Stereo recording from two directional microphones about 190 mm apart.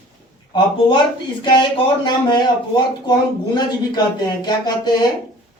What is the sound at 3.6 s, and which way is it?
Speech, 20° left (ahead or behind).